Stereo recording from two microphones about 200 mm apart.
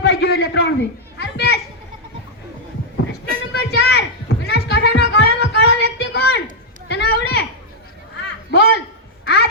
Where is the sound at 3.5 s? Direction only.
55° left (ahead or behind).